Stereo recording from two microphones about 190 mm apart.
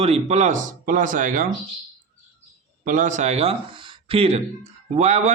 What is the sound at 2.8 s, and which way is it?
A man's voice, 40° right (ahead or behind).